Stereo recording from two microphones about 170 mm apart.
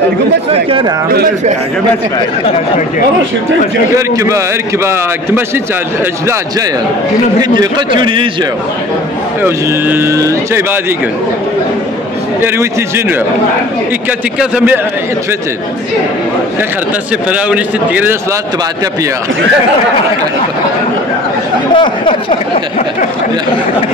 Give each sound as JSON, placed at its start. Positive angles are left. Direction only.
{"t": 0.7, "sound": "speech", "side_deg": -30}
{"t": 3.9, "sound": "speech", "side_deg": -20}
{"t": 7.4, "sound": "a man's voice", "side_deg": -25}
{"t": 9.4, "sound": "speech", "side_deg": -15}
{"t": 12.4, "sound": "speech", "side_deg": -15}
{"t": 14.4, "sound": "speech", "side_deg": -5}
{"t": 17.3, "sound": "speech", "side_deg": -10}
{"t": 21.7, "sound": "speech", "side_deg": 30}